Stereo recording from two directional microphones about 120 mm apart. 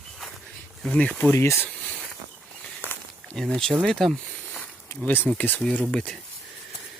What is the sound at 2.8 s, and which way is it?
Walk, 15° left (ahead or behind).